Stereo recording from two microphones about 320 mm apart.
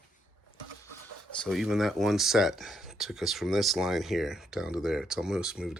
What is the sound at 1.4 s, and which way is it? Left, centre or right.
Speech, centre.